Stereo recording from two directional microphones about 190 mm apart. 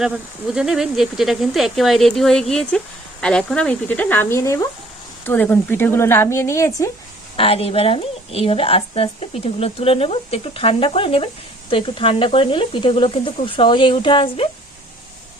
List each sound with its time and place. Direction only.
0.5 s speech: 5° right (ahead or behind); by 6.9 s 15° left (ahead or behind)
7.3 s a woman's voice: 30° left (ahead or behind)